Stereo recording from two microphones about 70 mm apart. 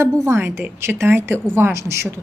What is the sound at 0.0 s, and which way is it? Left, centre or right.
A woman's voice, right.